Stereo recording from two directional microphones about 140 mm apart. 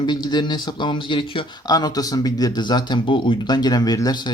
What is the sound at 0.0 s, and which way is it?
Speech, 30° left (ahead or behind).